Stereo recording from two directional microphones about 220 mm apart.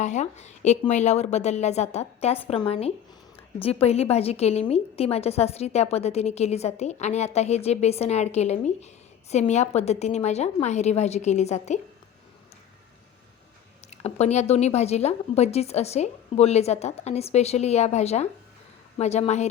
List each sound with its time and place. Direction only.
0.0 s a woman's voice: 30° left (ahead or behind)
13.9 s a woman's voice: 30° left (ahead or behind)